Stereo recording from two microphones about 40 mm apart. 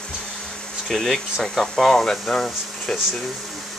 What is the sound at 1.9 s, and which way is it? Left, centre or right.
Speech, centre.